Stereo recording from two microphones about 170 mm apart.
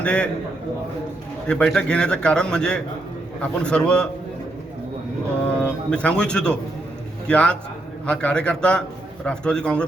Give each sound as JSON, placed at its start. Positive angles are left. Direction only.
{"t": 0.0, "sound": "a man's voice", "side_deg": 5}
{"t": 1.5, "sound": "a man's voice", "side_deg": 5}
{"t": 5.5, "sound": "a man's voice", "side_deg": 5}